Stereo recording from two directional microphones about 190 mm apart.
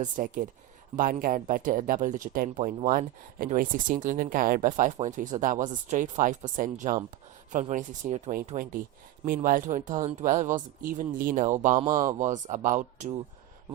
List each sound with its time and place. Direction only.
0.0 s speech: 45° right (ahead or behind)